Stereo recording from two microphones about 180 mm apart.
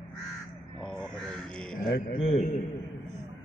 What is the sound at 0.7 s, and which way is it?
Speech, 5° left (ahead or behind).